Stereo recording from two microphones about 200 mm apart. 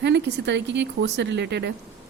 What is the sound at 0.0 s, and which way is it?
Speech, 60° right (ahead or behind).